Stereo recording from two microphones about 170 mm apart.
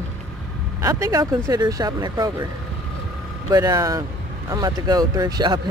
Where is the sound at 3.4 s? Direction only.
20° right (ahead or behind).